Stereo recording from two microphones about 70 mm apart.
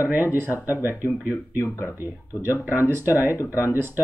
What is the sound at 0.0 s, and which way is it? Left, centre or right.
Speech, right.